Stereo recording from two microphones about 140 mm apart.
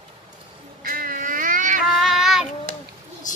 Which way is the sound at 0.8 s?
90° right.